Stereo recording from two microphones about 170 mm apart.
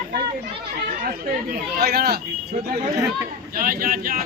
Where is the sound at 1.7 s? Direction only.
65° right (ahead or behind).